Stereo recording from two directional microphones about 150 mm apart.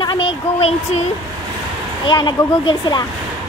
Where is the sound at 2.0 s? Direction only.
30° left (ahead or behind).